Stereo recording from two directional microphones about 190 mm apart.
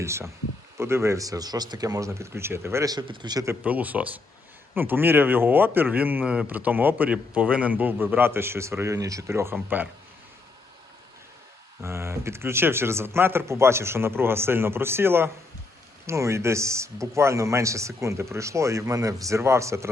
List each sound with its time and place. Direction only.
0.0 s speech: 15° right (ahead or behind)
11.8 s speech: 15° right (ahead or behind)